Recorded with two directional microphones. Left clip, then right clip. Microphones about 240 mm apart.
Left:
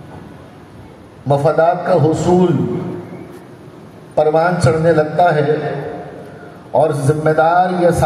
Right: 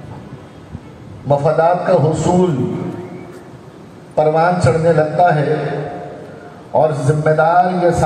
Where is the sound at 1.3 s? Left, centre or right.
Left.